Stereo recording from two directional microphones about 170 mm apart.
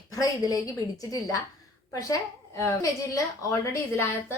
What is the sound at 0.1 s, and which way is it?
A woman's voice, 20° left (ahead or behind).